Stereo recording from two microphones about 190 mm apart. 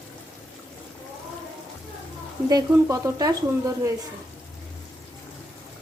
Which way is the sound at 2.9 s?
15° right (ahead or behind).